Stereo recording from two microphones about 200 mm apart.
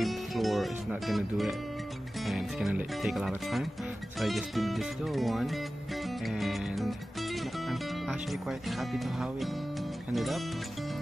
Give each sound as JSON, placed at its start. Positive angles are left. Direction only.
{"t": 0.0, "sound": "speech", "side_deg": 0}
{"t": 6.0, "sound": "music", "side_deg": 0}
{"t": 10.1, "sound": "speech", "side_deg": 0}